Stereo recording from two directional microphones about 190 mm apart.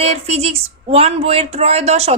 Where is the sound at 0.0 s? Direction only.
35° right (ahead or behind).